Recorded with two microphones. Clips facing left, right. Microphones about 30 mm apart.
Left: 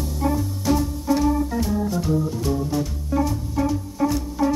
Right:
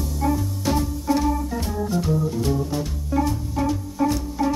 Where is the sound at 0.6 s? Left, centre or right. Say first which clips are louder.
Left 4 dB; centre.